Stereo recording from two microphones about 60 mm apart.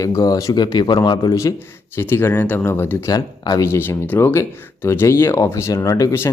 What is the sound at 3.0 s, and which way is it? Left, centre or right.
Speech, left.